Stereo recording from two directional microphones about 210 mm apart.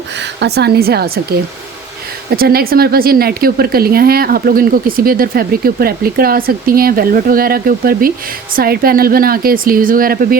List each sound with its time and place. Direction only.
0.2 s a woman's voice: 55° right (ahead or behind)
2.3 s speech: 45° right (ahead or behind)